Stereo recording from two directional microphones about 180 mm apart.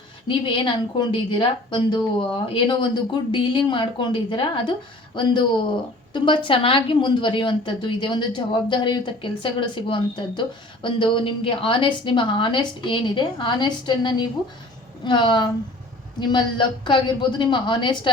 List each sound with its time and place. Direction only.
0.3 s a woman's voice: 25° left (ahead or behind)